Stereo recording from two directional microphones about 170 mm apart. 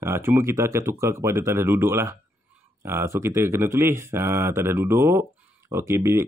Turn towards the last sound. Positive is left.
turn(degrees=-15)  # may be behind; listen again after turning